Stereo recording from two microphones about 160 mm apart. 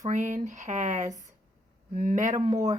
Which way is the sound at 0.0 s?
50° right (ahead or behind).